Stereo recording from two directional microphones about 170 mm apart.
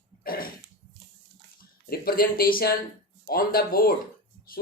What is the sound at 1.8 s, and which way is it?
Speech, 60° left (ahead or behind).